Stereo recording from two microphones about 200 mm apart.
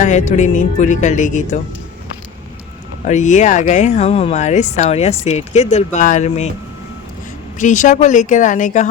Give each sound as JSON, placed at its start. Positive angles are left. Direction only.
{"t": 0.0, "sound": "speech", "side_deg": 35}
{"t": 3.1, "sound": "speech", "side_deg": 35}
{"t": 7.6, "sound": "speech", "side_deg": 40}